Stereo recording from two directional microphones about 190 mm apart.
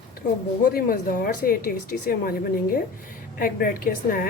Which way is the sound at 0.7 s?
50° left (ahead or behind).